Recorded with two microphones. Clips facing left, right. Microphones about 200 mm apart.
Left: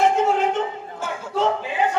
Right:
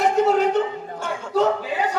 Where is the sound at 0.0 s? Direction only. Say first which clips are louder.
Right 1 dB; 40° right (ahead or behind).